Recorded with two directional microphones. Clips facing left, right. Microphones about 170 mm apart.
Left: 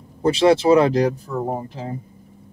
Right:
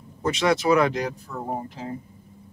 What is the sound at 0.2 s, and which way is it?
Speech, 30° left (ahead or behind).